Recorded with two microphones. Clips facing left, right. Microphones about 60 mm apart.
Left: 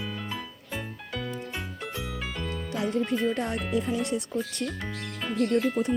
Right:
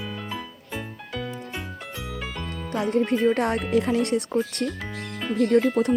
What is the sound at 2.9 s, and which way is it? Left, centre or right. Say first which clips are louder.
Speech: right 7 dB; right.